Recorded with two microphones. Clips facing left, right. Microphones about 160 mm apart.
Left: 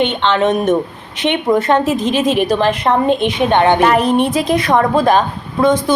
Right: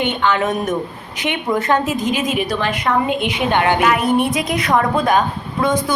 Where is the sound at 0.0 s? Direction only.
25° left (ahead or behind).